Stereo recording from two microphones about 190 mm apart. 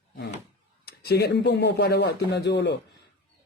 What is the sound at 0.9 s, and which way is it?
A man's voice, 60° left (ahead or behind).